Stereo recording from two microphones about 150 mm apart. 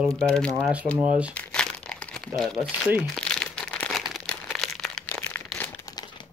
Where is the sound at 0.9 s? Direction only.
10° right (ahead or behind).